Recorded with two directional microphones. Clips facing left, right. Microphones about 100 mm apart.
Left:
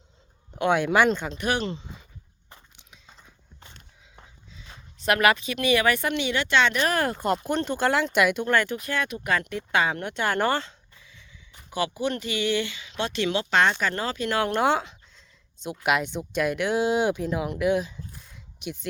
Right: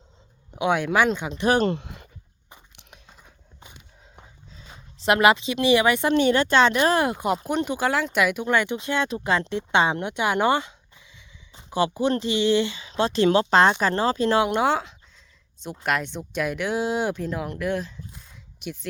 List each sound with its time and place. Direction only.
0.5 s speech: 5° right (ahead or behind)
1.4 s speech: 35° right (ahead or behind)
1.6 s a sound: 65° right (ahead or behind)
3.6 s a sound: 10° right (ahead or behind)
4.9 s speech: 25° right (ahead or behind)
6.1 s speech: 40° right (ahead or behind)
6.8 s speech: 20° right (ahead or behind); by 8.4 s centre (ahead or behind)
8.4 s speech: 15° right (ahead or behind)
11.5 s speech: 30° right (ahead or behind)
14.4 s speech: 5° right (ahead or behind)